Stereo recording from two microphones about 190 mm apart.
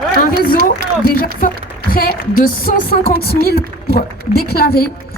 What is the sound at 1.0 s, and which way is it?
A woman's voice, 50° left (ahead or behind).